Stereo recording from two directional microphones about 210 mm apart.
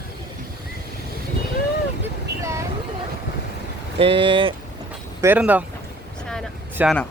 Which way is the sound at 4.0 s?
25° right (ahead or behind).